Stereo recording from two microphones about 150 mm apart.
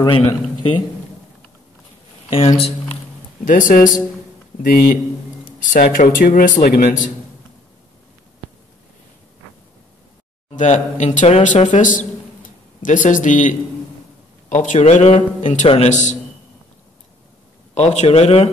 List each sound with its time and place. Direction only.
0.0 s a man's voice: 25° left (ahead or behind)
2.2 s speech: 40° left (ahead or behind)
3.4 s speech: 60° left (ahead or behind)
10.5 s speech: 55° left (ahead or behind)
11.7 s speech: 60° left (ahead or behind)
17.7 s speech: 50° left (ahead or behind)